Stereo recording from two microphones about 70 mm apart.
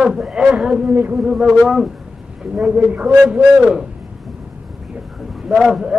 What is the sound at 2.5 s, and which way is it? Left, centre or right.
Speech, centre.